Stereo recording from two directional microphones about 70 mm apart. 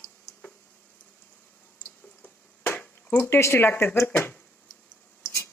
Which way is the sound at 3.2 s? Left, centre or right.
Left.